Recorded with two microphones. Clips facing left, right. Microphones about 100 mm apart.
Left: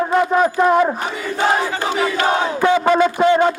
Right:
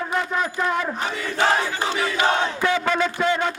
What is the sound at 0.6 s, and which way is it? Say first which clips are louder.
Battle cry: left 11 dB; 25° left (ahead or behind).